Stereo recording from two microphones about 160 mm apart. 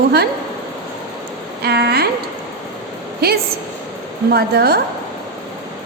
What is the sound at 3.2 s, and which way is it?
A woman's voice, 75° right (ahead or behind).